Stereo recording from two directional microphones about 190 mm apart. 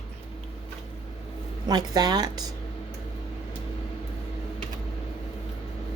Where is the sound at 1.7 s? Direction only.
20° right (ahead or behind).